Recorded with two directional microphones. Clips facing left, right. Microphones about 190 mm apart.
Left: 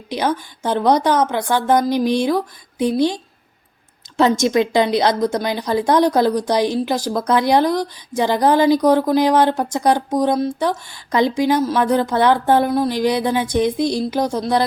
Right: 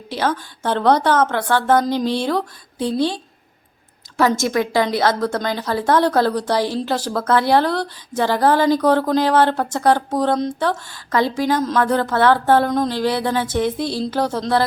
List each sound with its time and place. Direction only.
0.1 s a woman's voice: 15° left (ahead or behind)
4.2 s a woman's voice: 20° left (ahead or behind)